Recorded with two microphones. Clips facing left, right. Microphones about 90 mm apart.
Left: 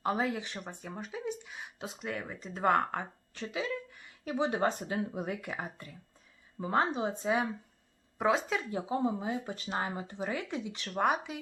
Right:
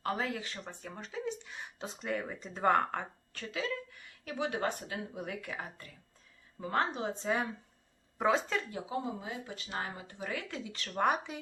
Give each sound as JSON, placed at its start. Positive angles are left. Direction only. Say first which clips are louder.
{"t": 0.0, "sound": "speech", "louder": "left 3 dB", "side_deg": 15}
{"t": 3.3, "sound": "speech", "louder": "left 2 dB", "side_deg": 20}
{"t": 8.7, "sound": "speech", "louder": "left 5 dB", "side_deg": 30}